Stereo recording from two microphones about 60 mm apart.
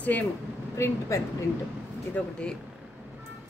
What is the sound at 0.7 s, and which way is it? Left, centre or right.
Speech, left.